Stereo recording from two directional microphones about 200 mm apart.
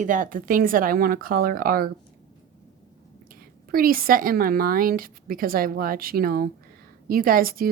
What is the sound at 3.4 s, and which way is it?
A woman's voice, 45° right (ahead or behind).